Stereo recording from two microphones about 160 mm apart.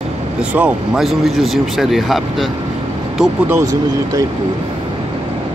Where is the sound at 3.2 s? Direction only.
15° right (ahead or behind).